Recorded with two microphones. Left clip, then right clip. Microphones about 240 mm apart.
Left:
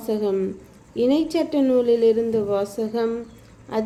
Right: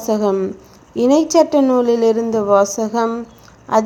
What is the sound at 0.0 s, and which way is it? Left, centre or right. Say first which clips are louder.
A woman's voice: right 6 dB; centre.